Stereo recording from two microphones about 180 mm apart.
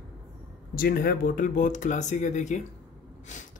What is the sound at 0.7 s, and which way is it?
A man's voice, 55° left (ahead or behind).